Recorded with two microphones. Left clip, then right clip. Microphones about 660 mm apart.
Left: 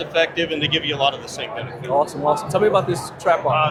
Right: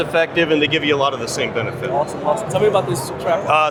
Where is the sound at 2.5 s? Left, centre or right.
Left.